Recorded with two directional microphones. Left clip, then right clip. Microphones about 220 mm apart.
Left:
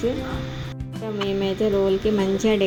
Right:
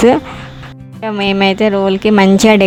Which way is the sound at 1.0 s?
40° right (ahead or behind).